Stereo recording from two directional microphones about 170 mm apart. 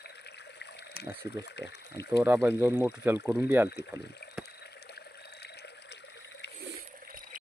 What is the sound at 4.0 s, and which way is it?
Speech, 80° left.